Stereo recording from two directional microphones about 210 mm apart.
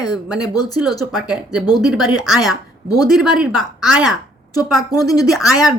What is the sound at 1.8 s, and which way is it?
A woman's voice, centre (ahead or behind).